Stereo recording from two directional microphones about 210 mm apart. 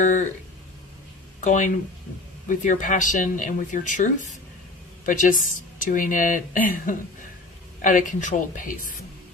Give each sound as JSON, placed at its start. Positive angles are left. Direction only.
{"t": 1.4, "sound": "speech", "side_deg": 35}